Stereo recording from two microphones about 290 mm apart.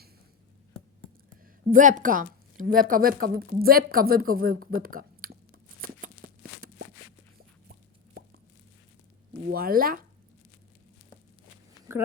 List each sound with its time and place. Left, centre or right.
1.7 s a woman's voice: right
5.8 s a sound: right
9.6 s a woman's voice: right